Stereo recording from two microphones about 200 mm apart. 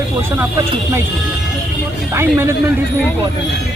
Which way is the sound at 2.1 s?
10° right (ahead or behind).